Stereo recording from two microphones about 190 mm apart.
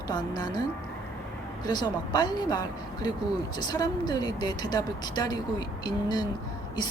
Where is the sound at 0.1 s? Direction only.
20° left (ahead or behind).